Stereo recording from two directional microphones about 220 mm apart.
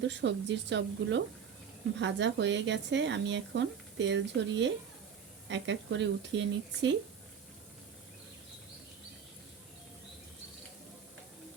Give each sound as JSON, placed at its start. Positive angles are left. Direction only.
{"t": 0.0, "sound": "speech", "side_deg": -55}